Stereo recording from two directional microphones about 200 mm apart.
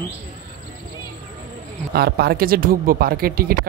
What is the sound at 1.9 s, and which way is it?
Speech, 50° right (ahead or behind).